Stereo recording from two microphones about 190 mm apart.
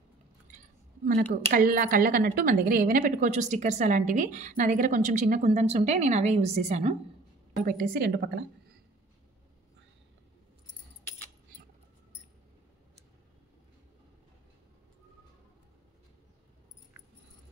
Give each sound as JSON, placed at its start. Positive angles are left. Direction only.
{"t": 1.0, "sound": "a woman's voice", "side_deg": -45}
{"t": 7.6, "sound": "a woman's voice", "side_deg": -50}